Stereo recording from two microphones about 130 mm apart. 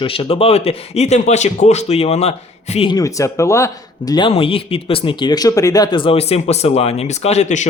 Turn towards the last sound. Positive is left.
turn(degrees=65)  # may be behind; listen again after turning